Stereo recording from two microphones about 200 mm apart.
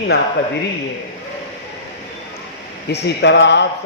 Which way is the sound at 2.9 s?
60° left (ahead or behind).